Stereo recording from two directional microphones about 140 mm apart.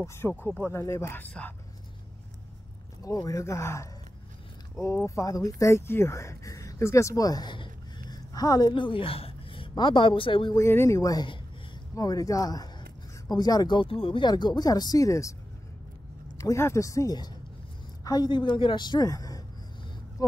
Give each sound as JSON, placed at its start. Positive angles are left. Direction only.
{"t": 0.0, "sound": "speech", "side_deg": 20}
{"t": 3.0, "sound": "speech", "side_deg": 25}
{"t": 10.5, "sound": "speech", "side_deg": 20}
{"t": 16.3, "sound": "speech", "side_deg": 20}